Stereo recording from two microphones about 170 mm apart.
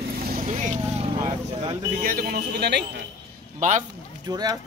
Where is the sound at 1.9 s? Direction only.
55° right (ahead or behind).